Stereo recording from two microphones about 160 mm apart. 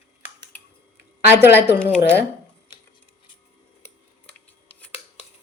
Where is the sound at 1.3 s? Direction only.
15° right (ahead or behind).